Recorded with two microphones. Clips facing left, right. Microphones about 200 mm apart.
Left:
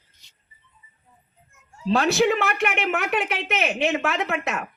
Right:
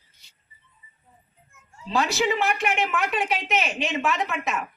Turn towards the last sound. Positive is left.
turn(degrees=70)  # may be behind; listen again after turning